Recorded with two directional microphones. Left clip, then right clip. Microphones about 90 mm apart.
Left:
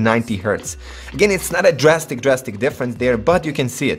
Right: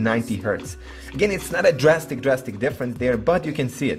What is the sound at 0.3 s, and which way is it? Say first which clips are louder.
A man's voice: left 4 dB; 55° left (ahead or behind).